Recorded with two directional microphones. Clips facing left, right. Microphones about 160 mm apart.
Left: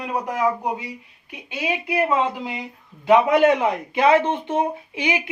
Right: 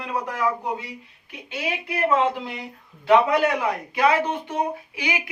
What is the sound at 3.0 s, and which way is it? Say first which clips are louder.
Speech: left 3 dB; 20° left (ahead or behind).